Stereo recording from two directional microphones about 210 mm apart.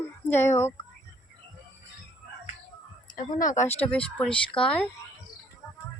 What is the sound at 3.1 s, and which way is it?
Speech, 40° left (ahead or behind).